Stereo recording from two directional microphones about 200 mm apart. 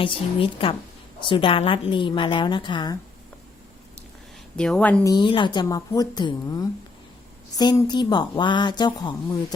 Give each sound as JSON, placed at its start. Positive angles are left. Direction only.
{"t": 0.0, "sound": "a woman's voice", "side_deg": 25}
{"t": 4.5, "sound": "a woman's voice", "side_deg": 5}
{"t": 5.1, "sound": "a woman's voice", "side_deg": 25}